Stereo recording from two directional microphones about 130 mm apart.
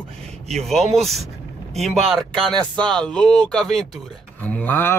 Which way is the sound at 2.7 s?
35° right (ahead or behind).